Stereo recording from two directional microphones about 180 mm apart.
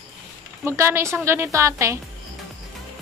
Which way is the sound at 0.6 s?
15° right (ahead or behind).